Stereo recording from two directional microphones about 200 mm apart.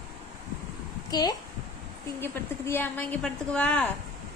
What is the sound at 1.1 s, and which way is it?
A woman's voice, 20° left (ahead or behind).